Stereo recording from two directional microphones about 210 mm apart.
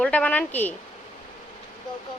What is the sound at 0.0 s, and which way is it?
Speech, 5° left (ahead or behind).